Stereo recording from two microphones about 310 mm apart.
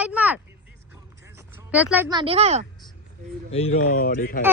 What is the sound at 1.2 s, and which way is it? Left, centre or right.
Speech, centre.